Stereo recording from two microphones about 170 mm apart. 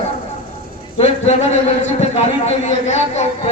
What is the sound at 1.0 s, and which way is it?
Speech, 40° left (ahead or behind).